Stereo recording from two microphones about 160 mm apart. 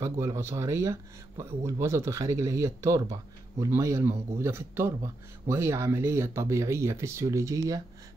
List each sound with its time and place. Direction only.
0.0 s speech: 20° right (ahead or behind)